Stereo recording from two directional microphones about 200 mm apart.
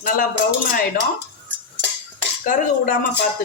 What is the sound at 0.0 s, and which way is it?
Speech, 45° left (ahead or behind).